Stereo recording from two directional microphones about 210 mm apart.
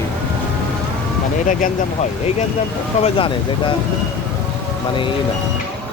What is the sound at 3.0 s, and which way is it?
Speech, 25° left (ahead or behind).